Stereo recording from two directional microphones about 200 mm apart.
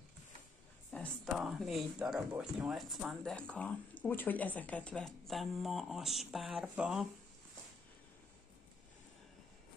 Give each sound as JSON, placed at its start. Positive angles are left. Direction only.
{"t": 0.9, "sound": "speech", "side_deg": 0}